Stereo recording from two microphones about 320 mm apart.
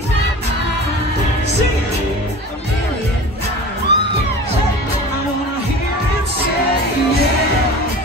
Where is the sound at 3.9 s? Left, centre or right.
Right.